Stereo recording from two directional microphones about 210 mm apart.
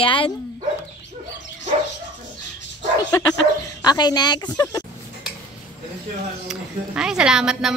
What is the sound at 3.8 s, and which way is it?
Speech, 20° left (ahead or behind).